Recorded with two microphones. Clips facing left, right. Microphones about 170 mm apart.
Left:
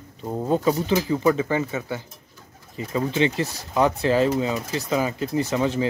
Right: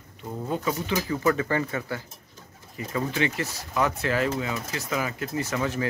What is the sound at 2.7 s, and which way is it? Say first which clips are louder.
Speech: left 4 dB; 25° left (ahead or behind).